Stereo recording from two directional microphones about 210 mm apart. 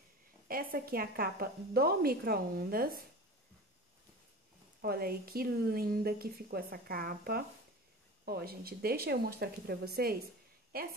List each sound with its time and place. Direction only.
0.5 s a woman's voice: 45° right (ahead or behind)
4.8 s a woman's voice: 45° right (ahead or behind)